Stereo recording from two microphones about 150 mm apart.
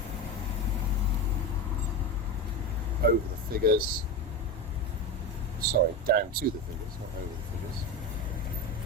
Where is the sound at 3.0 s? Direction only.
80° right.